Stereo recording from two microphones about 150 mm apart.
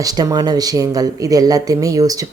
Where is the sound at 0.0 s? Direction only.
25° right (ahead or behind).